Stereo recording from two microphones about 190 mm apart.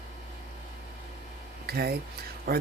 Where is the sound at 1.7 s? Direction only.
55° right (ahead or behind).